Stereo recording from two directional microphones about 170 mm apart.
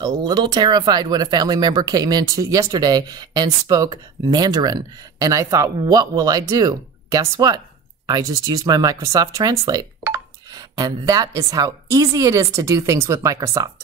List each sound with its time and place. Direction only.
0.0 s speech: 25° right (ahead or behind)